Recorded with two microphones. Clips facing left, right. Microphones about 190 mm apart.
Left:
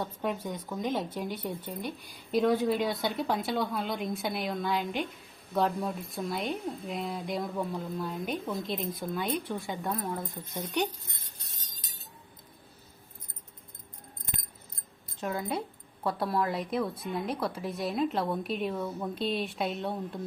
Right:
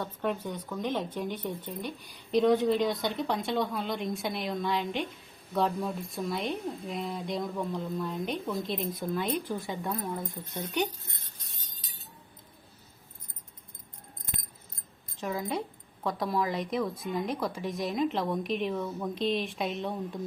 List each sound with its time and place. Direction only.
0.0 s a woman's voice: 10° left (ahead or behind)
15.2 s a woman's voice: centre (ahead or behind)